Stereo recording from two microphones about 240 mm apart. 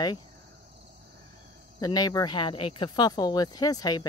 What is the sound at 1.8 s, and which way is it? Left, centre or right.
Speech, centre.